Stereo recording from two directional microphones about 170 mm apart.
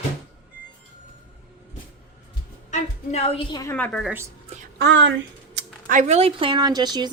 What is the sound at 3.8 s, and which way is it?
Speech, 5° left (ahead or behind).